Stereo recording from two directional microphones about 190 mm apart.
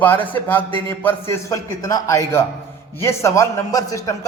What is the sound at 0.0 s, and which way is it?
A woman's voice, 10° left (ahead or behind).